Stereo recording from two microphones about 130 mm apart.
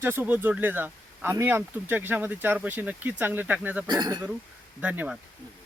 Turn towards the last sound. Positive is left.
turn(degrees=-10)  # may be behind; listen again after turning